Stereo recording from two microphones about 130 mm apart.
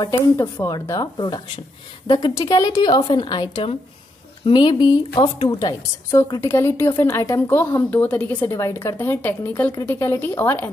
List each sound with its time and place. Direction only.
0.1 s a woman's voice: 15° left (ahead or behind)
0.7 s a woman's voice: 25° left (ahead or behind)